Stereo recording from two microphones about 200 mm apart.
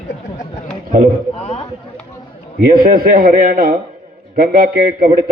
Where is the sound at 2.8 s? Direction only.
45° right (ahead or behind).